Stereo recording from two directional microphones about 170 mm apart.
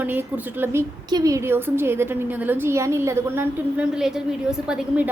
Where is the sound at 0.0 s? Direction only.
10° right (ahead or behind).